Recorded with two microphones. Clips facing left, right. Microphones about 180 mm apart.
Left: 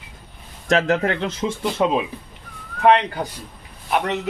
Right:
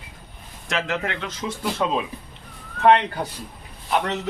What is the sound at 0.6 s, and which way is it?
Speech, 40° left (ahead or behind).